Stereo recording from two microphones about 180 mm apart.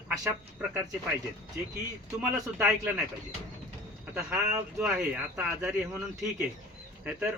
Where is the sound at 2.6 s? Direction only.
10° right (ahead or behind).